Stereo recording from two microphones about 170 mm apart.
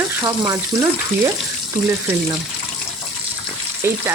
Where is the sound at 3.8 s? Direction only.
15° right (ahead or behind).